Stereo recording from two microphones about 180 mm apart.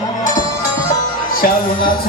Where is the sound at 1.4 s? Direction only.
50° left (ahead or behind).